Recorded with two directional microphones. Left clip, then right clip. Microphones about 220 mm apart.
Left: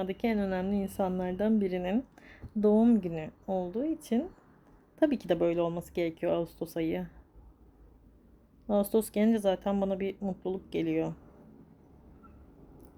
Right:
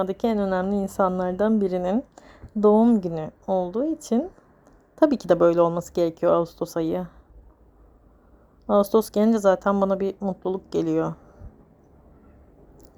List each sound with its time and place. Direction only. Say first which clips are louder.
0.0 s a woman's voice: right 8 dB; 20° right (ahead or behind)
8.6 s speech: right 9 dB; 20° right (ahead or behind)